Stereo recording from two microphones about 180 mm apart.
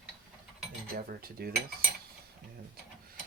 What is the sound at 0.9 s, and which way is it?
Speech, 55° right (ahead or behind).